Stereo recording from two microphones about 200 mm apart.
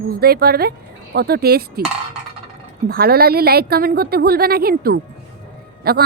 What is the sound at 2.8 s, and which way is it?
A woman's voice, 50° right (ahead or behind).